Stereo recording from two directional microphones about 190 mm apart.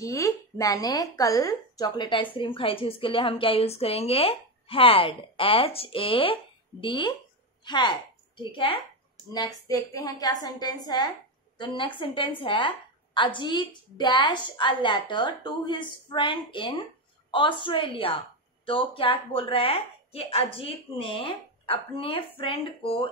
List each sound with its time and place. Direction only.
0.0 s a woman's voice: 15° left (ahead or behind)